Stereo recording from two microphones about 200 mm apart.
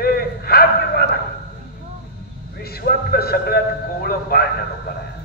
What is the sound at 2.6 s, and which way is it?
A man's voice, 50° left (ahead or behind).